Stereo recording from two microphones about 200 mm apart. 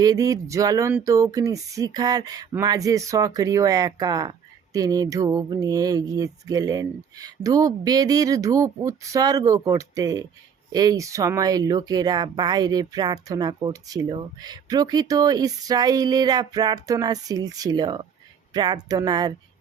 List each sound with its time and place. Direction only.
0.0 s speech: 15° right (ahead or behind)